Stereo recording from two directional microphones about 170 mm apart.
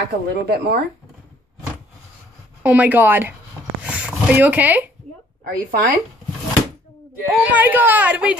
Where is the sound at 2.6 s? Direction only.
10° right (ahead or behind).